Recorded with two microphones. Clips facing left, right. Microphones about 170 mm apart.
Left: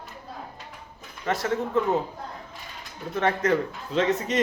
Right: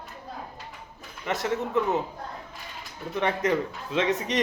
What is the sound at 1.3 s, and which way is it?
Speech, 20° right (ahead or behind).